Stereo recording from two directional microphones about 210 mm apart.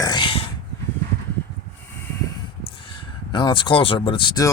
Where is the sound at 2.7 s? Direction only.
25° left (ahead or behind).